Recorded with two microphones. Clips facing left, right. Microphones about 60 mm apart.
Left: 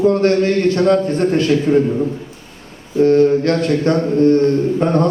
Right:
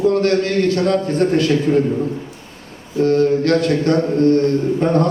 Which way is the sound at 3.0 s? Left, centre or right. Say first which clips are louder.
Left 3 dB; left.